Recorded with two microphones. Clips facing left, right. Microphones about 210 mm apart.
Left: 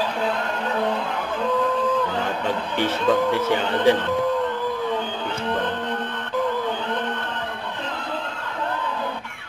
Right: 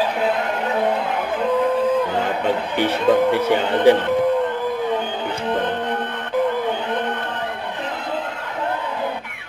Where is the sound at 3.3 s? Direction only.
15° right (ahead or behind).